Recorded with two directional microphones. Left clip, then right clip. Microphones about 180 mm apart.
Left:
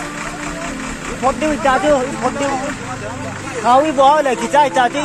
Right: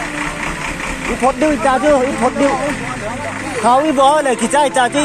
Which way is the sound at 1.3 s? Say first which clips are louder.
Right 1 dB; 60° right (ahead or behind).